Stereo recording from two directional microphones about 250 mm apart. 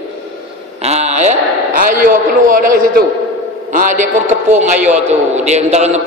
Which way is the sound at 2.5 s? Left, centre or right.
Right.